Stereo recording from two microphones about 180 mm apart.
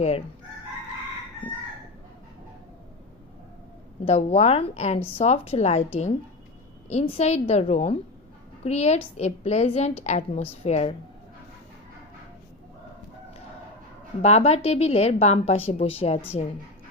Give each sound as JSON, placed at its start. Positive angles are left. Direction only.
{"t": 4.0, "sound": "a woman's voice", "side_deg": 35}
{"t": 14.2, "sound": "a woman's voice", "side_deg": 35}